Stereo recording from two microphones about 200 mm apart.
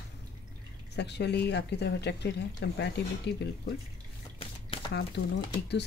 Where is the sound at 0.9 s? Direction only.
55° left (ahead or behind).